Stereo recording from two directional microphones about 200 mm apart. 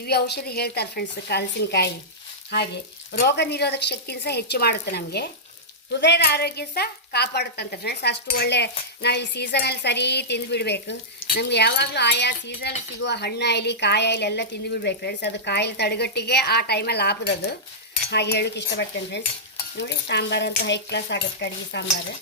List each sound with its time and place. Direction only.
0.0 s a woman's voice: 55° left (ahead or behind)
3.1 s a woman's voice: 55° left (ahead or behind)